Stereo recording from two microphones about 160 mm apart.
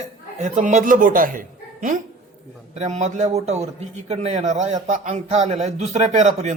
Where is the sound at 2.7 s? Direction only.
45° right (ahead or behind).